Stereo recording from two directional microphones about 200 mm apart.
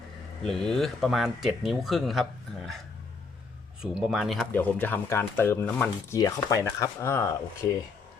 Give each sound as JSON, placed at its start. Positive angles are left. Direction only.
{"t": 0.4, "sound": "speech", "side_deg": 0}
{"t": 3.8, "sound": "speech", "side_deg": 0}